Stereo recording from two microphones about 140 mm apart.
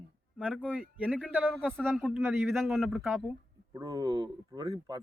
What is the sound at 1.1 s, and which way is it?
Speech, 5° left (ahead or behind).